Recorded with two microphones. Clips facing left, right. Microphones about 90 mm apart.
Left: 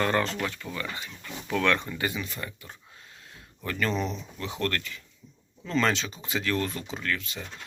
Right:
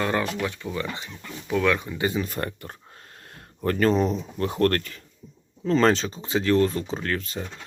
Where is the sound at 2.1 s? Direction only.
45° right (ahead or behind).